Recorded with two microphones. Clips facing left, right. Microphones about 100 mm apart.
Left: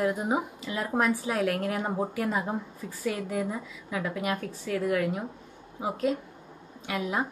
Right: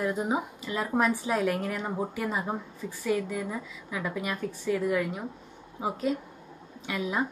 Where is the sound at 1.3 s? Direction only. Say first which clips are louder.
Even; centre (ahead or behind).